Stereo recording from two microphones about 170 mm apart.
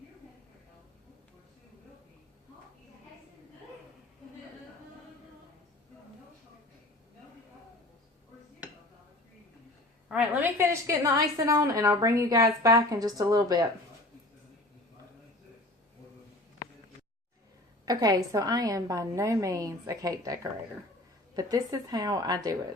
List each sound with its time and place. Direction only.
10.1 s a woman's voice: 10° right (ahead or behind)
17.8 s a woman's voice: 20° right (ahead or behind)